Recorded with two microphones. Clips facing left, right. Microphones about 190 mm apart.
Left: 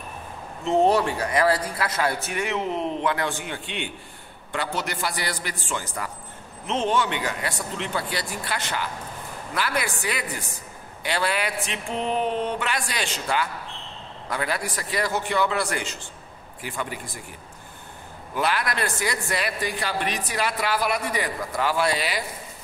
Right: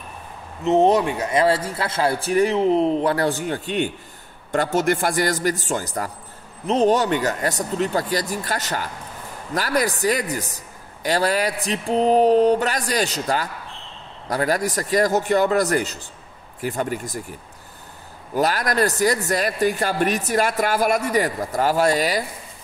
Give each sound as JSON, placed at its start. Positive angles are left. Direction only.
{"t": 0.7, "sound": "a man's voice", "side_deg": -20}
{"t": 18.3, "sound": "a man's voice", "side_deg": -40}